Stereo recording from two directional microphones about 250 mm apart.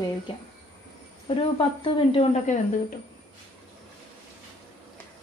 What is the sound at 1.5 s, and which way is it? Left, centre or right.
Speech, left.